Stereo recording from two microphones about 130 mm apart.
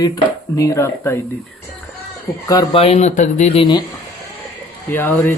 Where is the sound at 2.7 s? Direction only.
50° left (ahead or behind).